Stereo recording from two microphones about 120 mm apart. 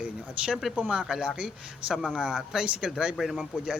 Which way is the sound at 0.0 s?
5° right (ahead or behind).